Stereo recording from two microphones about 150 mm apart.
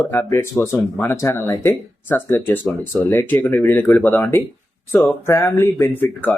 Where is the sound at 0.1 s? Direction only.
20° left (ahead or behind).